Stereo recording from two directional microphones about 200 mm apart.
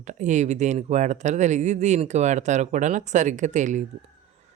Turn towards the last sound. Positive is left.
turn(degrees=-35)  # may be behind; listen again after turning